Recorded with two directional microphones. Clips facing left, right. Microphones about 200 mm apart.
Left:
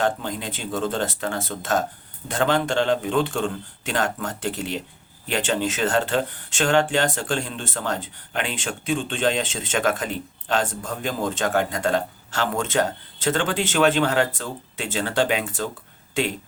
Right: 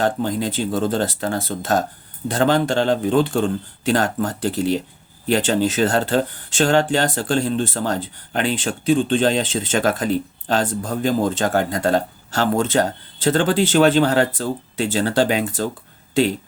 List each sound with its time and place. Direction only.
0.0 s speech: 35° right (ahead or behind)